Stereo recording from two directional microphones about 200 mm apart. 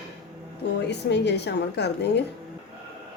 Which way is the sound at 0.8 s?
60° left (ahead or behind).